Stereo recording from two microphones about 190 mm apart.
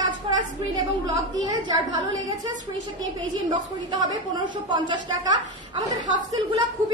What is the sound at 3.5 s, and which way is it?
A woman's voice, 20° right (ahead or behind).